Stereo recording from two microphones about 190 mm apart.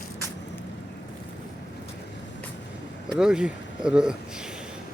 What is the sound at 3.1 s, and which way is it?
Speech, 5° right (ahead or behind).